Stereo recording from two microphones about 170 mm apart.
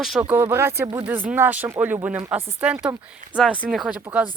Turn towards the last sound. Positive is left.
turn(degrees=-10)  # may be behind; listen again after turning